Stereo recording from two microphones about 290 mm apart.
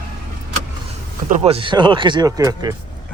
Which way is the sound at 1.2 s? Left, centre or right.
Right.